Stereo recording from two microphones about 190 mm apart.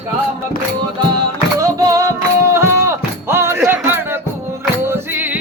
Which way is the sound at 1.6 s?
15° right (ahead or behind).